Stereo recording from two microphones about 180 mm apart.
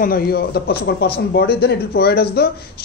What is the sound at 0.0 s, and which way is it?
Speech, 60° left (ahead or behind).